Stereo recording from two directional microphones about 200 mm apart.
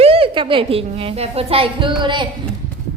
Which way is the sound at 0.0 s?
30° right (ahead or behind).